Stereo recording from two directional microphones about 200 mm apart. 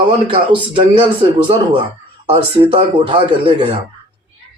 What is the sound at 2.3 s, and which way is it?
Speech, 25° right (ahead or behind).